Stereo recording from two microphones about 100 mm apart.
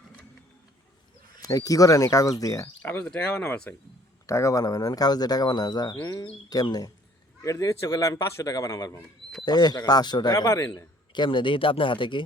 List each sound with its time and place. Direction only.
1.4 s speech: 40° left (ahead or behind)
2.8 s speech: 20° left (ahead or behind)
4.3 s speech: 30° left (ahead or behind)
11.1 s speech: 50° left (ahead or behind)